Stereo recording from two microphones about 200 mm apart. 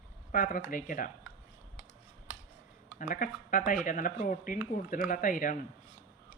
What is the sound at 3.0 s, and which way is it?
Speech, 40° left (ahead or behind).